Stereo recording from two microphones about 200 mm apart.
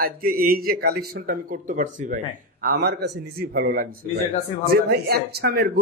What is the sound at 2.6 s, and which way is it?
Speech, 55° right (ahead or behind).